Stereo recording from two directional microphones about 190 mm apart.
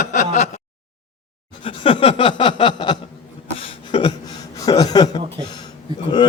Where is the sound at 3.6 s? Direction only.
25° left (ahead or behind).